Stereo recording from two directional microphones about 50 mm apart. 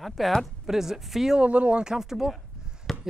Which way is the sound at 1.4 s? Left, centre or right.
Right.